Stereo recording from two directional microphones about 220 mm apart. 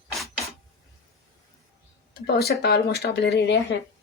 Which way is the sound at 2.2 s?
45° left (ahead or behind).